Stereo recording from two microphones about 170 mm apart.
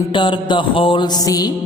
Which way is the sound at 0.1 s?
30° left (ahead or behind).